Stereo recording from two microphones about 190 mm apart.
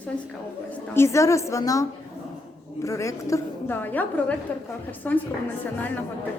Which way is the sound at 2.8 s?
15° left (ahead or behind).